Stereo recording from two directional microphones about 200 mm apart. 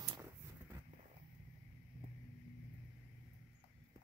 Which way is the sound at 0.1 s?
10° right (ahead or behind).